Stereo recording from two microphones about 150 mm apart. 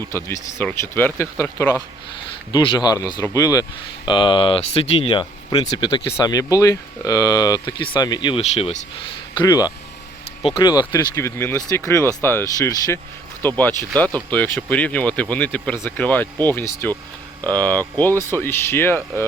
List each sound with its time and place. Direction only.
0.3 s speech: 15° left (ahead or behind)
2.5 s speech: 30° left (ahead or behind)
8.4 s speech: 45° left (ahead or behind)
9.4 s speech: 25° left (ahead or behind)